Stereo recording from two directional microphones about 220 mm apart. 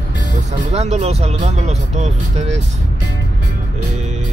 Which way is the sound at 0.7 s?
30° right (ahead or behind).